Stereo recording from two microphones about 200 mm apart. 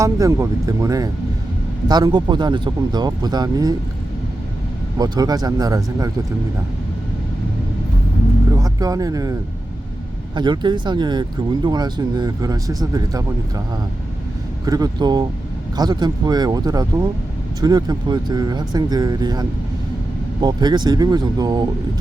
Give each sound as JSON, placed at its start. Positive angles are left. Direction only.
{"t": 0.0, "sound": "speech", "side_deg": -15}
{"t": 4.9, "sound": "speech", "side_deg": -20}
{"t": 8.5, "sound": "speech", "side_deg": -20}
{"t": 10.3, "sound": "speech", "side_deg": -20}
{"t": 14.6, "sound": "speech", "side_deg": -20}